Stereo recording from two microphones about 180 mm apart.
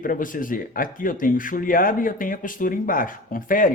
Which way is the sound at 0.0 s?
50° left (ahead or behind).